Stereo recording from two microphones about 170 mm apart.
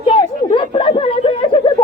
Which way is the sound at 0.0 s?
30° left (ahead or behind).